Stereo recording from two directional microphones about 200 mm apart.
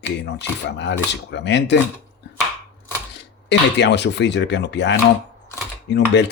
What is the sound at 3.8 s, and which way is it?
Speech, 60° left (ahead or behind).